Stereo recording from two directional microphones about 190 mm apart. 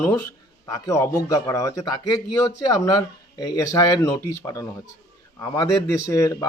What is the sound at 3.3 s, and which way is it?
Speech, 20° left (ahead or behind).